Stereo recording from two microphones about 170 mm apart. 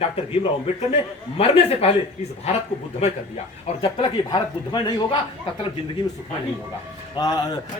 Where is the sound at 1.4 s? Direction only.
35° left (ahead or behind).